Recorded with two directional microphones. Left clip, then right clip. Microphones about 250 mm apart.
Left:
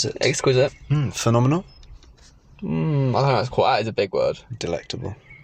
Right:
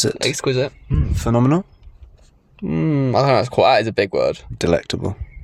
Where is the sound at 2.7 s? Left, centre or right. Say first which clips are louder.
Right 5 dB; right.